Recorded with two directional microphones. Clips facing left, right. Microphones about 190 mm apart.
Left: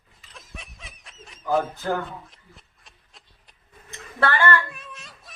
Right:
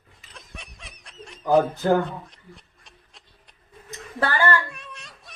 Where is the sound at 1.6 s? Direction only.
35° right (ahead or behind).